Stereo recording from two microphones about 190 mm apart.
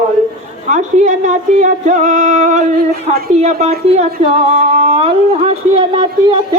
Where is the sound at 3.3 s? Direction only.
35° right (ahead or behind).